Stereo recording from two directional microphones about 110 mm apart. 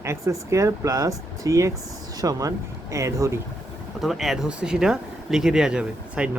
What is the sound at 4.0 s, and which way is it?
Speech, centre (ahead or behind).